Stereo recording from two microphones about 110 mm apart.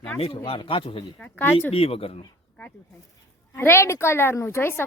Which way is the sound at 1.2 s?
15° left (ahead or behind).